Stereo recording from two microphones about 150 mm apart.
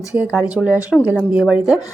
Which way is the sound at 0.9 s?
5° left (ahead or behind).